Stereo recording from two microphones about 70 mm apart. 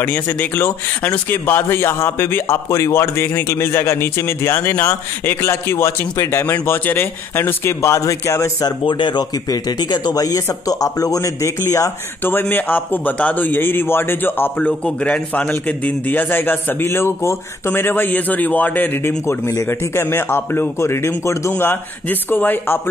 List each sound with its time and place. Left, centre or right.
0.0 s speech: left
8.5 s speech: left
12.2 s a man's voice: left
15.0 s a man's voice: centre
19.2 s a man's voice: left
19.7 s a man's voice: left